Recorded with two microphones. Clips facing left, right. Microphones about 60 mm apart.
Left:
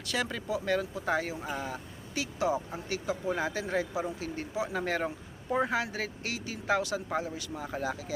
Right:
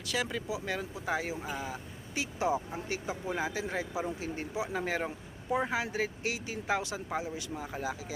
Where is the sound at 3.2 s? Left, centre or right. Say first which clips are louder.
Left 2 dB; centre.